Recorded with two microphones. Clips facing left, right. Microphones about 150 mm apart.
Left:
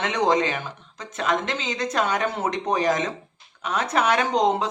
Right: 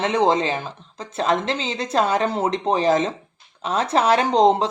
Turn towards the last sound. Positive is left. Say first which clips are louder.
# right 5 dB
turn(degrees=-30)  # may be behind; listen again after turning